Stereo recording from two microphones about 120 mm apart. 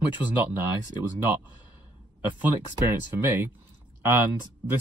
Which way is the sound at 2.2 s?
15° right (ahead or behind).